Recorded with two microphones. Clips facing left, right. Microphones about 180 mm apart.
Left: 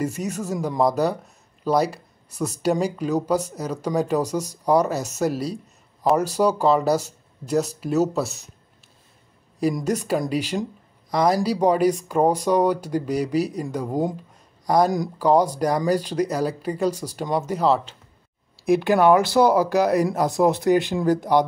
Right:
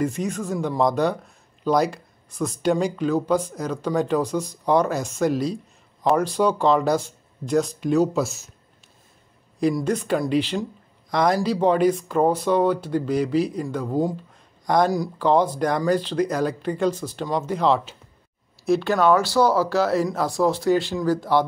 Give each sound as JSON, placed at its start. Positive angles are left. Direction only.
{"t": 0.0, "sound": "speech", "side_deg": 5}
{"t": 9.8, "sound": "speech", "side_deg": 10}
{"t": 15.1, "sound": "speech", "side_deg": 10}